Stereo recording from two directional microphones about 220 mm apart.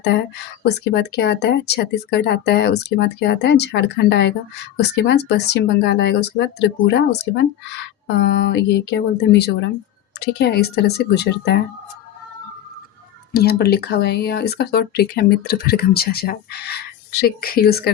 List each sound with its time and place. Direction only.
0.6 s speech: 50° left (ahead or behind)
13.4 s speech: 45° left (ahead or behind)